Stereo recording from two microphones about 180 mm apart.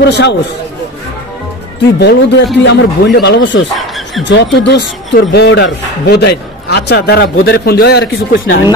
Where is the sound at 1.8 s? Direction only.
70° left (ahead or behind).